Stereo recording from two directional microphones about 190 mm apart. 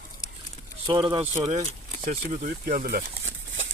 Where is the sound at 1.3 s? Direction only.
40° right (ahead or behind).